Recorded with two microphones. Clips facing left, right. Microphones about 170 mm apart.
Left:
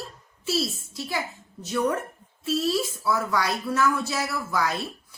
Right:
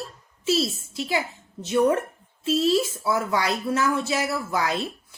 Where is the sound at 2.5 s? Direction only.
25° right (ahead or behind).